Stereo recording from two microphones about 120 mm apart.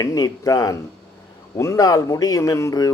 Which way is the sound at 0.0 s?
30° left (ahead or behind).